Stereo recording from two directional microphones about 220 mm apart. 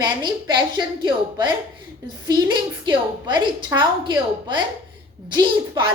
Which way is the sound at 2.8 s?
20° right (ahead or behind).